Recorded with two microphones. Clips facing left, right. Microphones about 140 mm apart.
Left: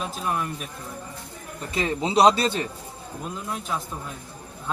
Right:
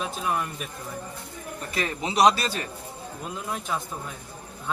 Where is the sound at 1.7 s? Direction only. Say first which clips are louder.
Left 5 dB; 25° left (ahead or behind).